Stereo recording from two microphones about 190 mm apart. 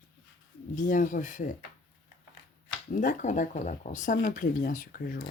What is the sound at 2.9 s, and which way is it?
Speech, 45° left (ahead or behind).